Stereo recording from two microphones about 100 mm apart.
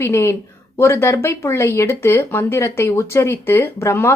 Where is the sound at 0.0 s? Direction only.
25° left (ahead or behind).